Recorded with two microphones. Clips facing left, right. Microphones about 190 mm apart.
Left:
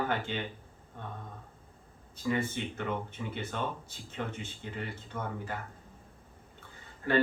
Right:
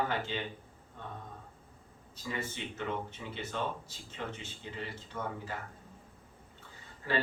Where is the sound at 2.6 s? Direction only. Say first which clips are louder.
Left 2 dB; 55° left (ahead or behind).